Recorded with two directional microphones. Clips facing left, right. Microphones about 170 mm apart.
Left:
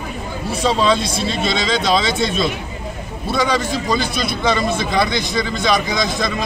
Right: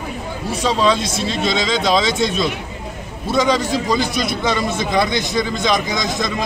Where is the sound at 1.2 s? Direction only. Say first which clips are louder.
Even; 15° right (ahead or behind).